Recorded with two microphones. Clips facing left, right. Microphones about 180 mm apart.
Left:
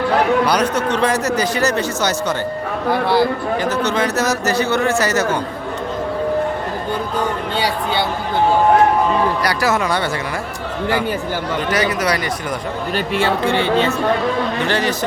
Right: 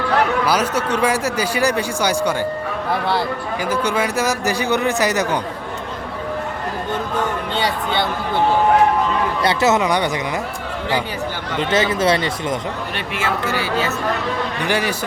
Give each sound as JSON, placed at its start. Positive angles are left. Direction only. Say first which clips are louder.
{"t": 0.4, "sound": "a man's voice", "louder": "left 2 dB", "side_deg": -5}
{"t": 2.9, "sound": "a man's voice", "louder": "left 5 dB", "side_deg": 0}
{"t": 3.6, "sound": "a man's voice", "louder": "even", "side_deg": -10}
{"t": 9.4, "sound": "speech", "louder": "right 2 dB", "side_deg": -25}
{"t": 11.7, "sound": "speech", "louder": "right 3 dB", "side_deg": -25}
{"t": 13.1, "sound": "speech", "louder": "left 4 dB", "side_deg": 30}
{"t": 14.6, "sound": "a man's voice", "louder": "right 1 dB", "side_deg": -10}